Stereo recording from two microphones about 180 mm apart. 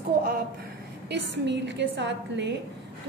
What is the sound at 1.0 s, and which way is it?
A woman's voice, 75° right (ahead or behind).